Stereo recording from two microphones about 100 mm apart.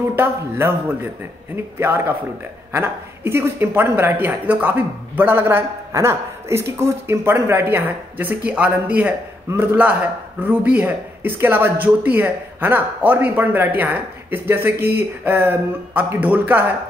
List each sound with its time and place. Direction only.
0.1 s a man's voice: 25° right (ahead or behind)